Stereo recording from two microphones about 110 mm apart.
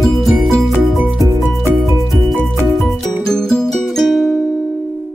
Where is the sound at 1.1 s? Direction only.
30° right (ahead or behind).